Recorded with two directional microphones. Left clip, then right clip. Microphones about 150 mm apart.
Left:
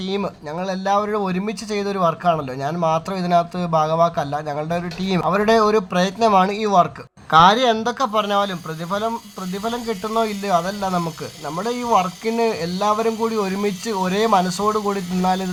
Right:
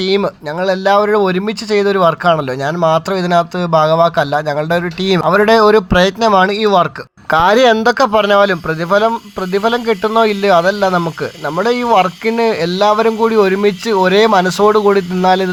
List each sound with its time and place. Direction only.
0.2 s speech: 25° right (ahead or behind)
7.3 s speech: 40° right (ahead or behind)